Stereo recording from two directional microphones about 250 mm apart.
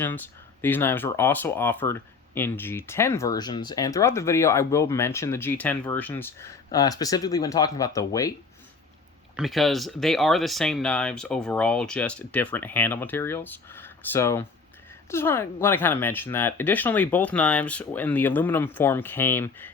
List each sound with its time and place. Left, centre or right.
0.0 s speech: centre
9.3 s speech: centre